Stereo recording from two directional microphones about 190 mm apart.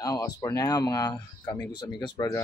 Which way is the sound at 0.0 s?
20° left (ahead or behind).